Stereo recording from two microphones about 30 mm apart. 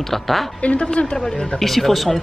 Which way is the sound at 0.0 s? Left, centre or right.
Centre.